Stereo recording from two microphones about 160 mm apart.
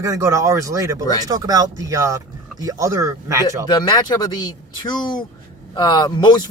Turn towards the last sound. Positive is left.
turn(degrees=30)  # may be behind; listen again after turning